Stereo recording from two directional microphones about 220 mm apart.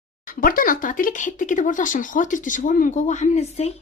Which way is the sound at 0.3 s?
40° left (ahead or behind).